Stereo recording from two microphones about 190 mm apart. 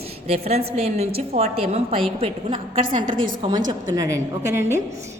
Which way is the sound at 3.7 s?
20° right (ahead or behind).